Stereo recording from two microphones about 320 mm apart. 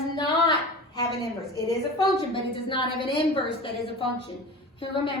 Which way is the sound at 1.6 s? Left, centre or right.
Centre.